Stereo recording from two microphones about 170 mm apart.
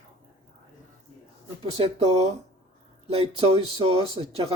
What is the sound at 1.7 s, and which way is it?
Speech, 35° right (ahead or behind).